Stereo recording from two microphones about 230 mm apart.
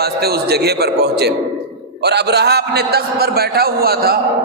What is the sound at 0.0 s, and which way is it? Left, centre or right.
A man's voice, right.